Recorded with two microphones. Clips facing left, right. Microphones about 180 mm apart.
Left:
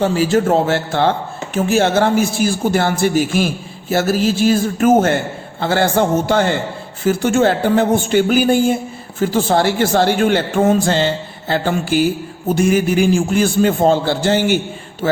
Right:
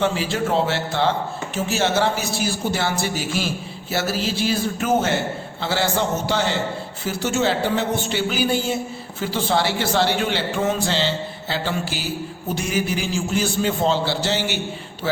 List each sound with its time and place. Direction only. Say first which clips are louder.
0.0 s a man's voice: left 7 dB; 40° left (ahead or behind)